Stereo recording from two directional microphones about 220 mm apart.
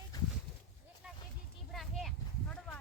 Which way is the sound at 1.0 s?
5° right (ahead or behind).